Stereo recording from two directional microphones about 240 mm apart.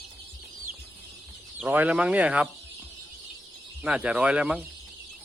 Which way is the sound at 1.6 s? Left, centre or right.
Centre.